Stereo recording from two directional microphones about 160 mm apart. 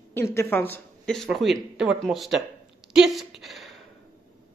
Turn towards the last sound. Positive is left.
turn(degrees=0)  # may be behind; listen again after turning